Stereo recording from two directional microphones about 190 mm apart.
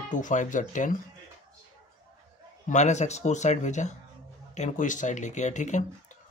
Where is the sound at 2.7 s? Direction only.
35° left (ahead or behind).